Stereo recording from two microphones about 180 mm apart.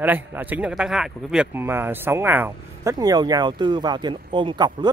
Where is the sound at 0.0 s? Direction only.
10° right (ahead or behind).